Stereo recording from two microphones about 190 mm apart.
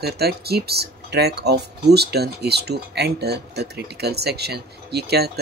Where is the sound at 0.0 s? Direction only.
55° right (ahead or behind).